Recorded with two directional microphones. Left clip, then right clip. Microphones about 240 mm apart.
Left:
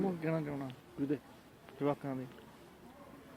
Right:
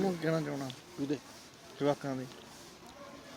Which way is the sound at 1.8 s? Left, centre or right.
Right.